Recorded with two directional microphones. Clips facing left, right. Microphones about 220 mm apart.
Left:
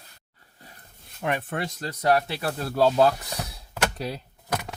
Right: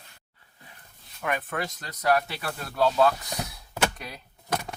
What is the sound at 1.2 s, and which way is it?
Speech, 30° left (ahead or behind).